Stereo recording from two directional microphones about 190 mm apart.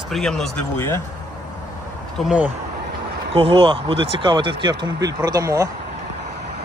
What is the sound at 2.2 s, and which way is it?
Speech, 5° right (ahead or behind).